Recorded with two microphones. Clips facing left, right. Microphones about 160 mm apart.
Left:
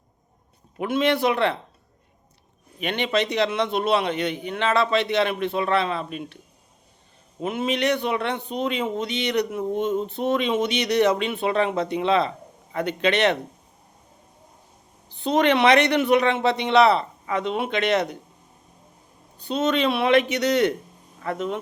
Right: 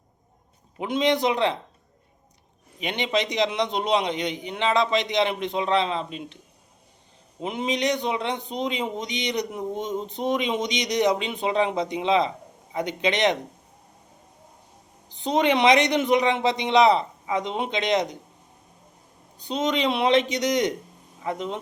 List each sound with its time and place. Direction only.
0.8 s a man's voice: 20° right (ahead or behind)
2.7 s a man's voice: 15° right (ahead or behind)
7.4 s a man's voice: 15° right (ahead or behind)
15.1 s a man's voice: 15° right (ahead or behind)
19.4 s a man's voice: 15° right (ahead or behind)